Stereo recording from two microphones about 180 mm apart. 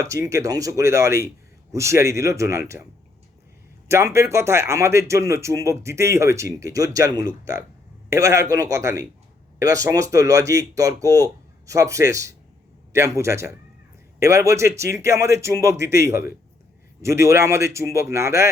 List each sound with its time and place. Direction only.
0.0 s a man's voice: 15° right (ahead or behind)
3.8 s a man's voice: 15° right (ahead or behind)